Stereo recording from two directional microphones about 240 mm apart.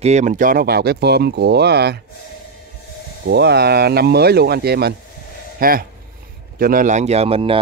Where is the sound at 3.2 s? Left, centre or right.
Right.